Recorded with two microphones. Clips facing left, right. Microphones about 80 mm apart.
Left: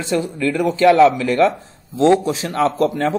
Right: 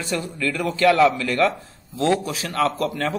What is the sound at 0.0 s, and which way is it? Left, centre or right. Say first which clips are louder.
A man's voice: left 6 dB; left.